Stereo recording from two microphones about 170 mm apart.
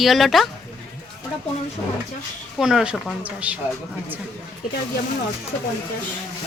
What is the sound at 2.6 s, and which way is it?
Speech, 5° right (ahead or behind).